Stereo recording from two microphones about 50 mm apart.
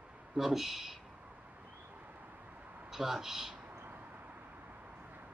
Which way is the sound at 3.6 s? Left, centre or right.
Right.